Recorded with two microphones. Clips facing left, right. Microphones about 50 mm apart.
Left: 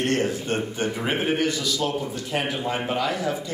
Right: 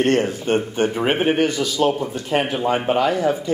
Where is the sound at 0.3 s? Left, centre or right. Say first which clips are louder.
Right 5 dB; right.